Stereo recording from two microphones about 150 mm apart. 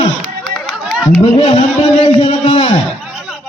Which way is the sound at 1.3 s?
35° left (ahead or behind).